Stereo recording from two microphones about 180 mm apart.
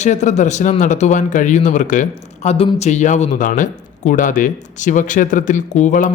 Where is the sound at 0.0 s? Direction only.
40° left (ahead or behind).